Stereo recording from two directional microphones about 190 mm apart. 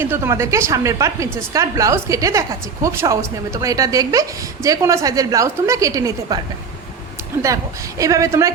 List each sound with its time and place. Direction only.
0.0 s a woman's voice: 15° right (ahead or behind)
7.4 s a woman's voice: 15° right (ahead or behind)